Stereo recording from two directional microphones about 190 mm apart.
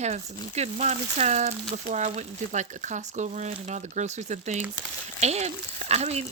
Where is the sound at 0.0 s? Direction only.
35° right (ahead or behind).